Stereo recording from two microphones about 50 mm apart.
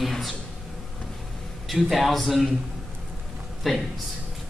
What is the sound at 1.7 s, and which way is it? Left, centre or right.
Speech, centre.